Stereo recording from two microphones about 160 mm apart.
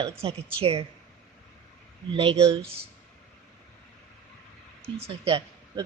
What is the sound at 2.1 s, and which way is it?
Speech, 35° right (ahead or behind).